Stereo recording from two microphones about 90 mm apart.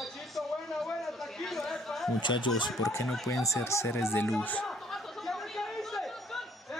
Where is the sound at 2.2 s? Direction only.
60° left (ahead or behind).